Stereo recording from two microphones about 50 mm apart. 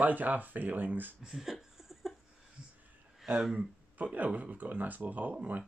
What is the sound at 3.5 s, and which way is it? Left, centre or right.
Speech, right.